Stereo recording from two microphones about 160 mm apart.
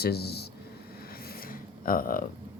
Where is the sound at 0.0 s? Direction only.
85° left.